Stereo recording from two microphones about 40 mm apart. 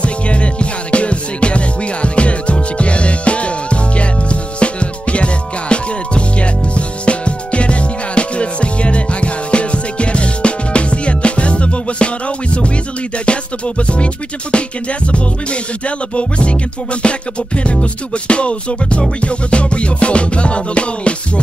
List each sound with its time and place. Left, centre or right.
0.0 s music: left
13.2 s music: left